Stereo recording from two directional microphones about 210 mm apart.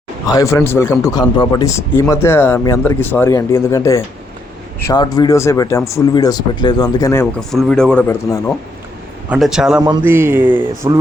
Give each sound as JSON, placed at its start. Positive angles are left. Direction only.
{"t": 0.3, "sound": "speech", "side_deg": 15}
{"t": 9.3, "sound": "speech", "side_deg": -5}
{"t": 9.8, "sound": "a man's voice", "side_deg": -15}